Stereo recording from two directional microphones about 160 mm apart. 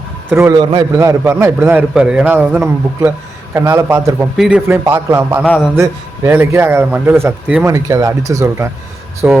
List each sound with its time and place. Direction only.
0.3 s a man's voice: 15° right (ahead or behind)
5.4 s a man's voice: 5° left (ahead or behind)
5.7 s a man's voice: 15° right (ahead or behind)